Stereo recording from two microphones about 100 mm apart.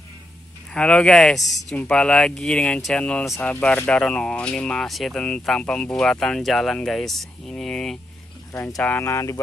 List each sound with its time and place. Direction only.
0.7 s speech: 10° left (ahead or behind)
8.8 s speech: 20° left (ahead or behind)